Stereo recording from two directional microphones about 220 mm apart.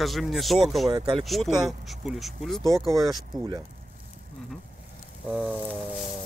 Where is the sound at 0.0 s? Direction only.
Centre (ahead or behind).